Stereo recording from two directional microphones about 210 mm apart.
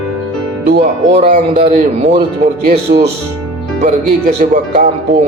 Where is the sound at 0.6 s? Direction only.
55° right (ahead or behind).